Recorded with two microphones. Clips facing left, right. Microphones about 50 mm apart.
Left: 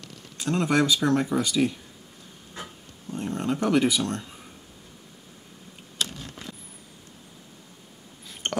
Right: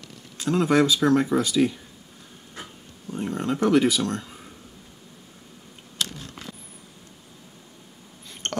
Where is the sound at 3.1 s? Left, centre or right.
Centre.